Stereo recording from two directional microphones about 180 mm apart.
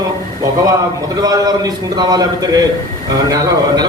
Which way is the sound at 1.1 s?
20° right (ahead or behind).